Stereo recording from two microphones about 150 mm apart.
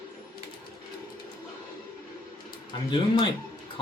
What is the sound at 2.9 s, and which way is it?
Speech, 30° left (ahead or behind).